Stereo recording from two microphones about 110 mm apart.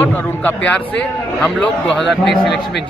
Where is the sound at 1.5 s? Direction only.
Centre (ahead or behind).